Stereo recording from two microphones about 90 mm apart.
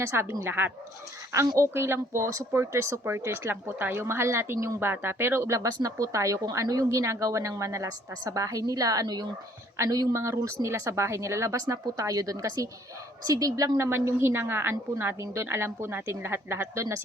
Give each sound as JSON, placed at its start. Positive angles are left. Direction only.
{"t": 0.0, "sound": "a woman's voice", "side_deg": -30}